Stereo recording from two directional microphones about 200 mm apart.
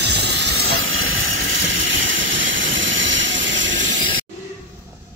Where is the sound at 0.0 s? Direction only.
60° right (ahead or behind).